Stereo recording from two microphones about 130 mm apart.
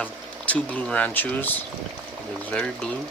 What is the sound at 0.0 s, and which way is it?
Speech, 10° left (ahead or behind).